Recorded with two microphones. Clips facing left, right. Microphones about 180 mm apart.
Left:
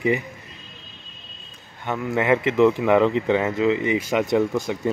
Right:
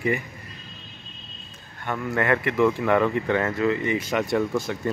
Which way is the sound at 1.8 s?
15° left (ahead or behind).